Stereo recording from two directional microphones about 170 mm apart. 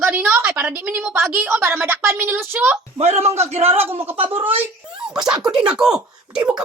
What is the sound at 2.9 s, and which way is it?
Speech, 40° right (ahead or behind).